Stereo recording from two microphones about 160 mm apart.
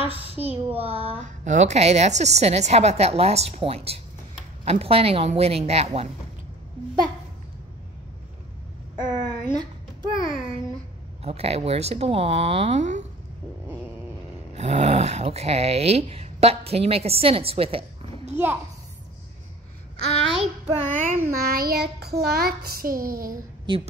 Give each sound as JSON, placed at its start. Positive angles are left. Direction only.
{"t": 0.0, "sound": "a sound", "side_deg": -35}
{"t": 0.4, "sound": "speech", "side_deg": -10}
{"t": 0.7, "sound": "speech", "side_deg": -35}
{"t": 9.2, "sound": "a sound", "side_deg": -25}
{"t": 11.2, "sound": "speech", "side_deg": -40}
{"t": 14.5, "sound": "speech", "side_deg": -45}
{"t": 18.3, "sound": "a child's voice", "side_deg": -15}
{"t": 20.3, "sound": "child singing", "side_deg": -45}
{"t": 21.3, "sound": "child singing", "side_deg": -70}